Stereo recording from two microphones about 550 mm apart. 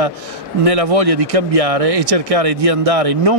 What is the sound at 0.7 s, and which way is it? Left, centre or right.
Speech, right.